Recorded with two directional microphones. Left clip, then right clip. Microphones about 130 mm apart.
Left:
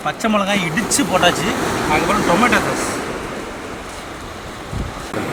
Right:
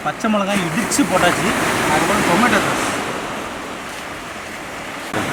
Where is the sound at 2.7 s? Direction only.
45° right (ahead or behind).